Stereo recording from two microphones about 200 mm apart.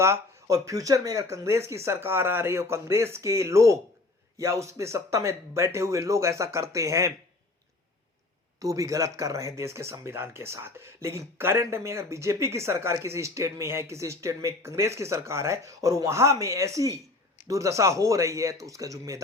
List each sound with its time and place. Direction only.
0.0 s speech: 15° right (ahead or behind)
8.6 s speech: 15° right (ahead or behind)